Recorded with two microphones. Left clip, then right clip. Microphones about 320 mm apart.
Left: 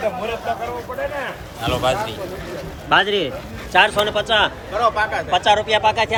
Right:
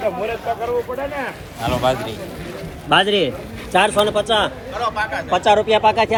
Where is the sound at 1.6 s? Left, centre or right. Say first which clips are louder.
Right 1 dB; centre.